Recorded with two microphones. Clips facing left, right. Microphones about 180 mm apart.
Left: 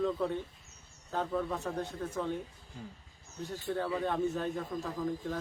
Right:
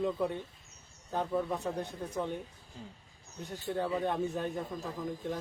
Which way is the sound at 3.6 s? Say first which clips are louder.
Right 1 dB; 20° right (ahead or behind).